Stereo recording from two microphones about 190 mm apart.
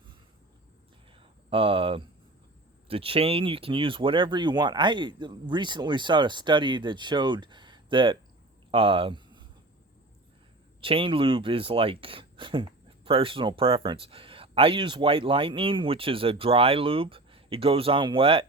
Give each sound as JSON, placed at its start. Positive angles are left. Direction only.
{"t": 1.2, "sound": "speech", "side_deg": -30}
{"t": 8.7, "sound": "a sound", "side_deg": -30}
{"t": 10.8, "sound": "speech", "side_deg": -30}